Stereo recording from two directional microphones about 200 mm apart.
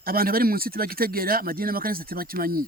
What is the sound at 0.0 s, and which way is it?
Speech, 45° right (ahead or behind).